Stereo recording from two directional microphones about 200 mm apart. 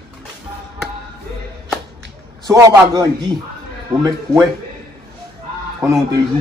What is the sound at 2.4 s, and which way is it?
Speech, 20° right (ahead or behind).